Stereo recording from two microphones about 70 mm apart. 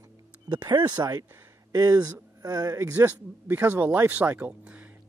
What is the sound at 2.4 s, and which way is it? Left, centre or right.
Speech, right.